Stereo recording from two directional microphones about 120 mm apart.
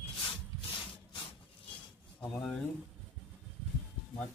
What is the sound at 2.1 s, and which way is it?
Speech, 5° left (ahead or behind).